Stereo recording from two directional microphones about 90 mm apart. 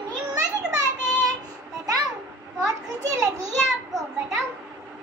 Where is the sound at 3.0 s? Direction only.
40° right (ahead or behind).